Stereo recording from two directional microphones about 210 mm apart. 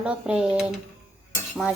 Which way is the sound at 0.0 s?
5° right (ahead or behind).